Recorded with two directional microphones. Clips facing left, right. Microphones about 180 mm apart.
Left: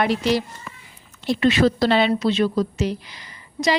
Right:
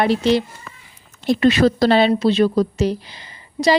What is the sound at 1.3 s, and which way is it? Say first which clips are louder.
Speech: right 3 dB; 40° right (ahead or behind).